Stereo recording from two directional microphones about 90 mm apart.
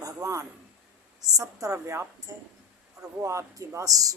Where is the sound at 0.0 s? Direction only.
35° right (ahead or behind).